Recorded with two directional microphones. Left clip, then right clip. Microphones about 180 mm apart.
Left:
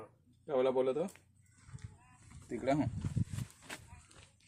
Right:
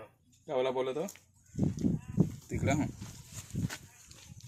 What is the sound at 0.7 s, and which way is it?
Speech, 20° right (ahead or behind).